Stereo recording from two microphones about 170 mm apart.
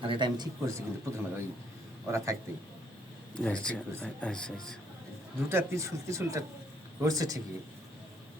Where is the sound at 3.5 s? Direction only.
5° left (ahead or behind).